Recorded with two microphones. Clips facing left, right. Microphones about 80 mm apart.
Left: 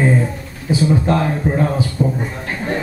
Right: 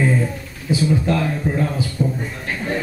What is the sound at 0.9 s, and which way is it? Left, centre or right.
A man's voice, left.